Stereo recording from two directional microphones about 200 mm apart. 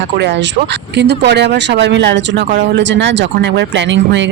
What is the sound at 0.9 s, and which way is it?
Speech, 60° right (ahead or behind).